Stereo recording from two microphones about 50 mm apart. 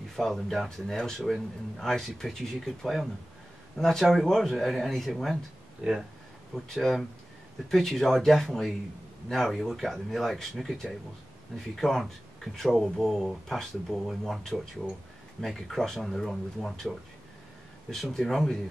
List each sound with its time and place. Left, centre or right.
0.1 s speech: centre
5.8 s speech: right
6.5 s speech: centre